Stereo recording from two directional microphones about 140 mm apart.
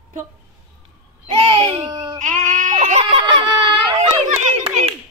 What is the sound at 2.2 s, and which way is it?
Goat, 65° right (ahead or behind).